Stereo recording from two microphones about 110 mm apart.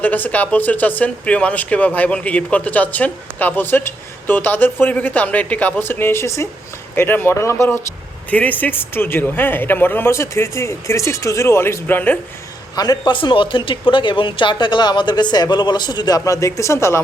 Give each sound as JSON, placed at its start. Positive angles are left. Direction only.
{"t": 0.0, "sound": "speech", "side_deg": 15}
{"t": 8.3, "sound": "speech", "side_deg": 15}
{"t": 12.7, "sound": "speech", "side_deg": 35}